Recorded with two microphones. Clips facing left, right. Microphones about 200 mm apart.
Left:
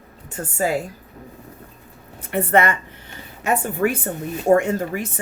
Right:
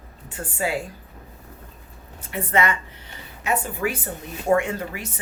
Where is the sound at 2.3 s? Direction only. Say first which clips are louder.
Left 5 dB; 60° left (ahead or behind).